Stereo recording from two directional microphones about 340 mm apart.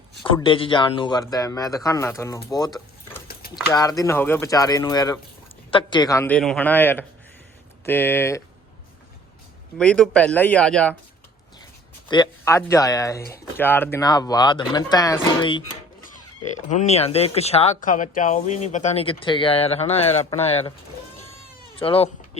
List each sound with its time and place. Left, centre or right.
0.3 s a man's voice: centre
9.7 s a man's voice: centre
12.0 s speech: centre
16.6 s speech: centre
21.8 s speech: centre